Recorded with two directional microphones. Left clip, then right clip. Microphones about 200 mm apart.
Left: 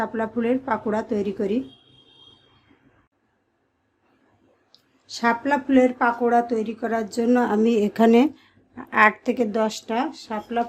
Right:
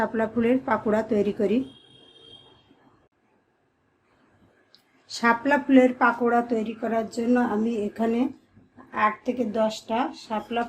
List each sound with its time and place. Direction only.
0.0 s speech: 10° left (ahead or behind)
4.7 s speech: 15° left (ahead or behind)